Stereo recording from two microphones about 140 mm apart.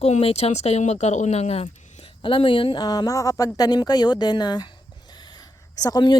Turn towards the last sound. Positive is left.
turn(degrees=30)  # may be behind; listen again after turning